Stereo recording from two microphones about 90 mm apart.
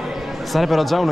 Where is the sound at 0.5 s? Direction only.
Centre (ahead or behind).